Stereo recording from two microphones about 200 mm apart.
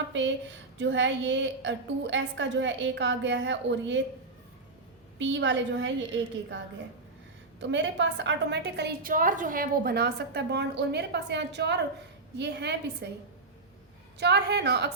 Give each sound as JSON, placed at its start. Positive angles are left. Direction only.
{"t": 0.8, "sound": "a woman's voice", "side_deg": -65}
{"t": 5.2, "sound": "a woman's voice", "side_deg": -65}
{"t": 7.6, "sound": "a woman's voice", "side_deg": -65}
{"t": 14.2, "sound": "a woman's voice", "side_deg": -55}